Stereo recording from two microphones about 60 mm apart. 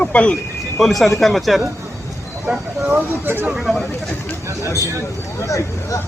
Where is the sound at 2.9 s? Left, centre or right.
Right.